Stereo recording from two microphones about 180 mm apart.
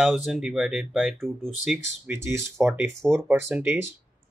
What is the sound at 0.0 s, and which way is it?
Speech, 5° right (ahead or behind).